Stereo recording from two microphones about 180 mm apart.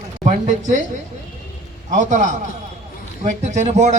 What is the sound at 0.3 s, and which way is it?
Speech, 45° right (ahead or behind).